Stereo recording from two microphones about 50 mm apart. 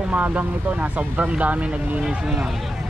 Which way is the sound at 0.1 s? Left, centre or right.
Right.